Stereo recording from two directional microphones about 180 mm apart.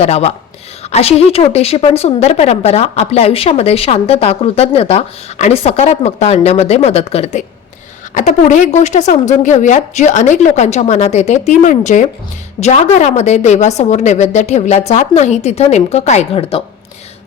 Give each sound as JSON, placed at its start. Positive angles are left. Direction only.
{"t": 0.0, "sound": "a woman's voice", "side_deg": 35}